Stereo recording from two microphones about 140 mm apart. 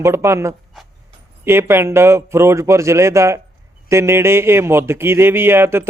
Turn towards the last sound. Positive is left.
turn(degrees=-15)  # may be behind; listen again after turning